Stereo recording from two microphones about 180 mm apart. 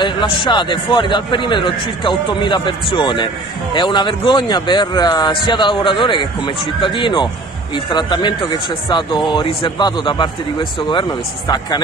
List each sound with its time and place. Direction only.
0.0 s speech: 25° left (ahead or behind)